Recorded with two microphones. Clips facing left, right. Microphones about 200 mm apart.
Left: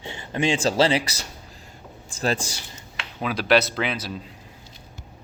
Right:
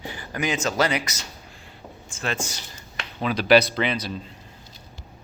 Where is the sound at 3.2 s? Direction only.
5° left (ahead or behind).